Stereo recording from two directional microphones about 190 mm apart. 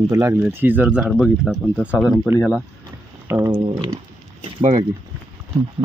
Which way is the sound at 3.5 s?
25° right (ahead or behind).